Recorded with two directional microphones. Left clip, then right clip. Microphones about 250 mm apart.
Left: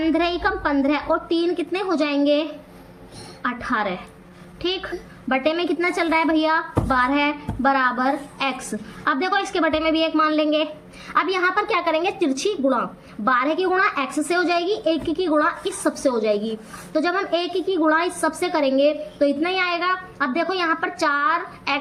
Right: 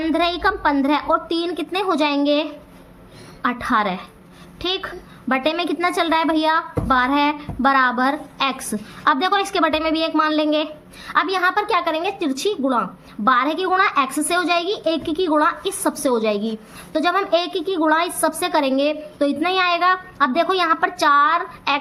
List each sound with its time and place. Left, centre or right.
0.0 s a woman's voice: right